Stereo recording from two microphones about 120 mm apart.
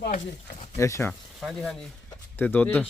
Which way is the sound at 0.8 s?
25° left (ahead or behind).